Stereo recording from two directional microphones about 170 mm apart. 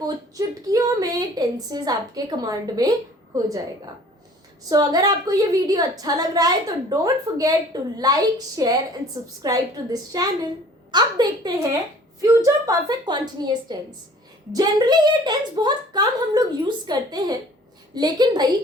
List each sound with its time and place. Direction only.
0.0 s a woman's voice: 20° right (ahead or behind)
4.7 s a woman's voice: 20° right (ahead or behind)